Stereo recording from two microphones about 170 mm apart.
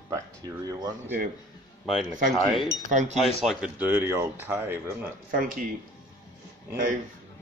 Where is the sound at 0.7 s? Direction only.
25° right (ahead or behind).